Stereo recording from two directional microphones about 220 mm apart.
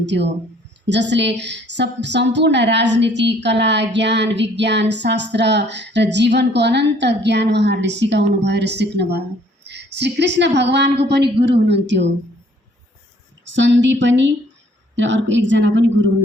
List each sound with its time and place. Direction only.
0.0 s a woman's voice: 50° right (ahead or behind)
13.4 s a woman's voice: 55° right (ahead or behind)